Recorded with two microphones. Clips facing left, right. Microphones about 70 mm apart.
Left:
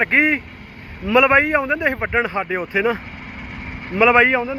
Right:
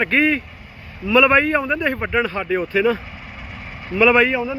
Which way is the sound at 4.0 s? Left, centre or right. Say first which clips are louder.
Left 1 dB; left.